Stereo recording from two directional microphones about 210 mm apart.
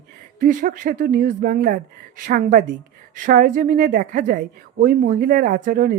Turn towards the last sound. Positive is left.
turn(degrees=-40)  # may be behind; listen again after turning